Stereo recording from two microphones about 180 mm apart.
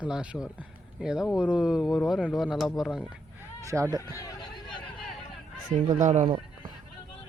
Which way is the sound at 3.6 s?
15° right (ahead or behind).